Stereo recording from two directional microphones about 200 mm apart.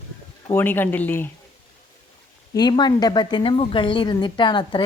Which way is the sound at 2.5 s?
20° left (ahead or behind).